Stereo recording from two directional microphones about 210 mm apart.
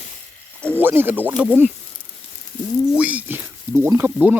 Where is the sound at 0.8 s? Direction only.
10° right (ahead or behind).